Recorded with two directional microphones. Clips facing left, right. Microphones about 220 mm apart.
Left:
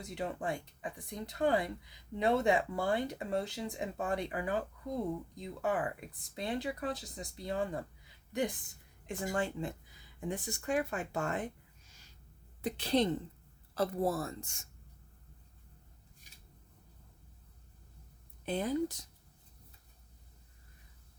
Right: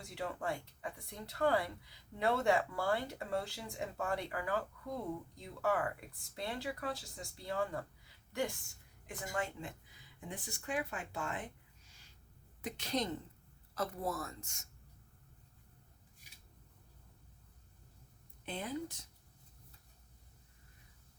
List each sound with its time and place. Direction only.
0.0 s speech: 20° left (ahead or behind)
9.0 s speech: 30° left (ahead or behind)
12.6 s speech: 30° left (ahead or behind)
18.4 s speech: 40° left (ahead or behind)